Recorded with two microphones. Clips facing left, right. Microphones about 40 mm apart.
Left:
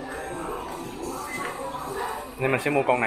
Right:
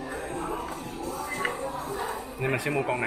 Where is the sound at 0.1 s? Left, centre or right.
Centre.